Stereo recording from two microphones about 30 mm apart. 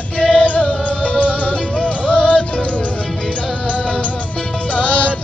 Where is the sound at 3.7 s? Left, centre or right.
Left.